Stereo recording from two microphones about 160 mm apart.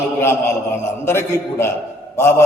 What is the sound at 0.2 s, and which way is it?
A man's voice, 15° left (ahead or behind).